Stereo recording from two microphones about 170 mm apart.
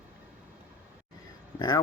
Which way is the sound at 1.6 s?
25° left (ahead or behind).